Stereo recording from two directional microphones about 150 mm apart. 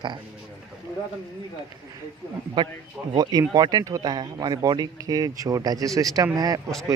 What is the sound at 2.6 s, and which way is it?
Speech, 30° right (ahead or behind).